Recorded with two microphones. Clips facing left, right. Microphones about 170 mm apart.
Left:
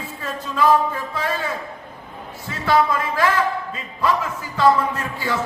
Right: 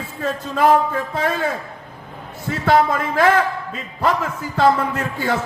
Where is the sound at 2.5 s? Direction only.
50° right (ahead or behind).